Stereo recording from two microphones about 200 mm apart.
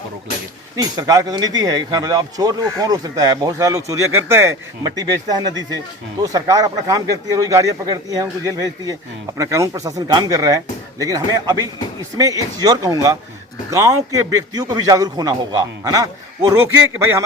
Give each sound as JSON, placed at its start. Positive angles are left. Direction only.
{"t": 0.8, "sound": "a man's voice", "side_deg": -20}